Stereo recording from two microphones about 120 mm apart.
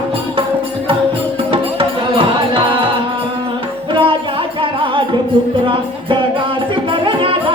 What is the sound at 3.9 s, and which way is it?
Music, 45° right (ahead or behind).